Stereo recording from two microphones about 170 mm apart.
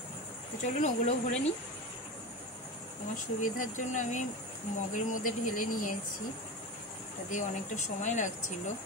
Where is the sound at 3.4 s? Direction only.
50° left (ahead or behind).